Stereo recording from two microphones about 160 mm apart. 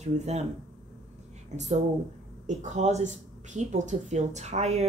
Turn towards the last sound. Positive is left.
turn(degrees=-45)  # may be behind; listen again after turning